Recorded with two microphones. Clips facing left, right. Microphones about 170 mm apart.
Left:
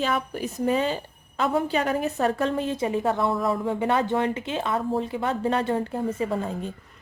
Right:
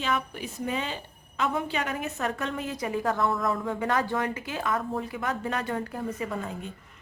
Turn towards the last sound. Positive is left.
turn(degrees=30)  # may be behind; listen again after turning